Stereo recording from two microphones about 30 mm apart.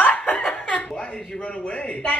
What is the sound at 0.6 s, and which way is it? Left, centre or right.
Laughter, left.